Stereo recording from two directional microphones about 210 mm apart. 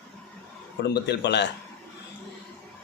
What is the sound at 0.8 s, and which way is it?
Speech, 50° left (ahead or behind).